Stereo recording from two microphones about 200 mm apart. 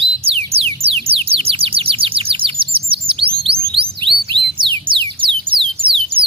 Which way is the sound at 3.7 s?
25° right (ahead or behind).